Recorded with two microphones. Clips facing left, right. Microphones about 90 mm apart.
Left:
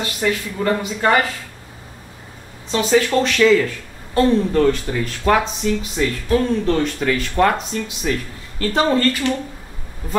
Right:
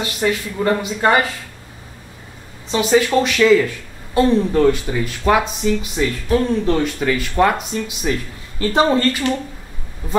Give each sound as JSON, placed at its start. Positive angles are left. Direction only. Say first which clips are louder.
{"t": 0.0, "sound": "speech", "louder": "right 1 dB", "side_deg": -20}
{"t": 2.7, "sound": "speech", "louder": "right 1 dB", "side_deg": -15}